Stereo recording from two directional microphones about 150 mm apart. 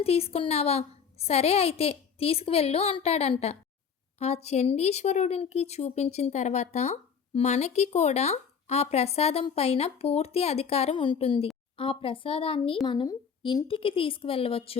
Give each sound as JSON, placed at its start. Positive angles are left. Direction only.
{"t": 0.0, "sound": "a woman's voice", "side_deg": 40}